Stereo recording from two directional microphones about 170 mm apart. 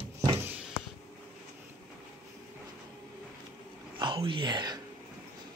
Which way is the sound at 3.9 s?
30° right (ahead or behind).